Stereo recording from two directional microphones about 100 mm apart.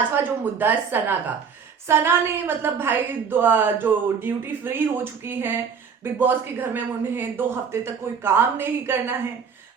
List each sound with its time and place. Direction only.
0.2 s a woman's voice: 20° right (ahead or behind)